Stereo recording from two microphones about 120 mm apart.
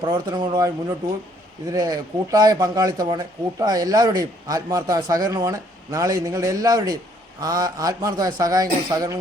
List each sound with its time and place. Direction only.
0.0 s speech: 40° right (ahead or behind)